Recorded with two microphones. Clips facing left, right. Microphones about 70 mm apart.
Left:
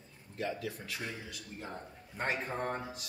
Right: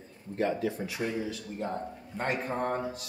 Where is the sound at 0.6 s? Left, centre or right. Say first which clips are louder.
Right 9 dB; right.